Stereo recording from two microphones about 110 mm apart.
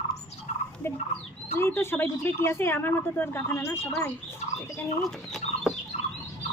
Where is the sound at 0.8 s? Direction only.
20° left (ahead or behind).